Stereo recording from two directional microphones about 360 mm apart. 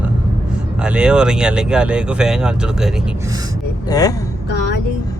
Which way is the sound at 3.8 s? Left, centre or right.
Centre.